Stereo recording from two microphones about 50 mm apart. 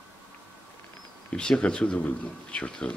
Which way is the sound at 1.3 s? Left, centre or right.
Centre.